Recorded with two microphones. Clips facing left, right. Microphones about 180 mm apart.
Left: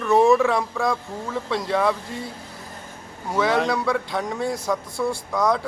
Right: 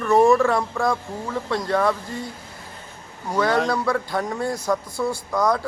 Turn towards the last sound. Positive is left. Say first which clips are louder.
# even
turn(degrees=0)  # may be behind; listen again after turning